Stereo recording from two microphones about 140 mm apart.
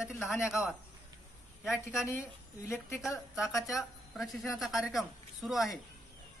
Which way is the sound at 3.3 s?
Centre (ahead or behind).